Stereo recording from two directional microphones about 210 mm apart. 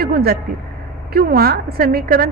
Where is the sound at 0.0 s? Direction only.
45° right (ahead or behind).